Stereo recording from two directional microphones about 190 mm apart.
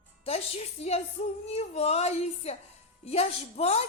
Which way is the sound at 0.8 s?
35° left (ahead or behind).